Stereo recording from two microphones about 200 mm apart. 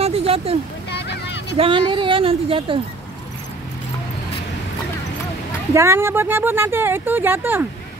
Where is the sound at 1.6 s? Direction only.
25° right (ahead or behind).